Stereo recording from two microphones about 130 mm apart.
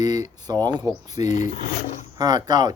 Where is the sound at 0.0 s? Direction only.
30° right (ahead or behind).